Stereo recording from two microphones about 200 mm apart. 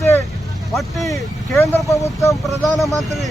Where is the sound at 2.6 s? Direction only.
Centre (ahead or behind).